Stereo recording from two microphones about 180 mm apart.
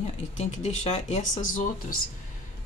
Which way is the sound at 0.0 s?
40° left (ahead or behind).